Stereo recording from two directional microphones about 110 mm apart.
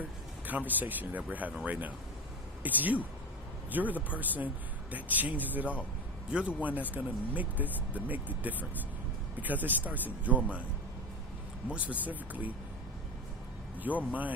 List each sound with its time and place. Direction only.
0.0 s speech: 15° right (ahead or behind)
11.7 s speech: 15° right (ahead or behind)
13.8 s speech: 15° right (ahead or behind)